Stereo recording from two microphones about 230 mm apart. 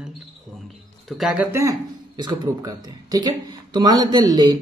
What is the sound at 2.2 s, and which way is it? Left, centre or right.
A man's voice, centre.